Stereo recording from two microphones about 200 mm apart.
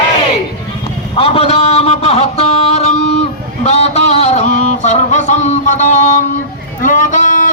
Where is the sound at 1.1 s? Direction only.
30° left (ahead or behind).